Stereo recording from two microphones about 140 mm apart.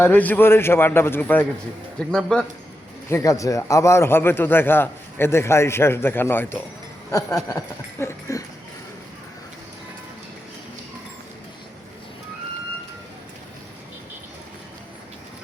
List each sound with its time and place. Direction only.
0.0 s a man's voice: 10° left (ahead or behind)
3.1 s a man's voice: 20° left (ahead or behind)